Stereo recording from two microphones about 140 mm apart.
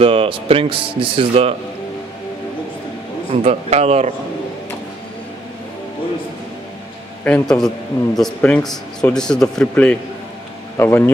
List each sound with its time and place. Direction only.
0.0 s speech: 40° right (ahead or behind)
3.3 s a man's voice: 45° right (ahead or behind)
7.2 s a man's voice: 5° left (ahead or behind)